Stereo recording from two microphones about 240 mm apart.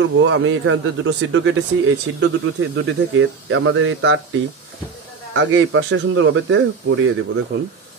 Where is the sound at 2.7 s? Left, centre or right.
Right.